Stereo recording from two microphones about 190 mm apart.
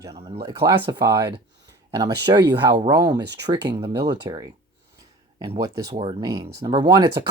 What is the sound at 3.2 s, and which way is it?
Speech, 65° right (ahead or behind).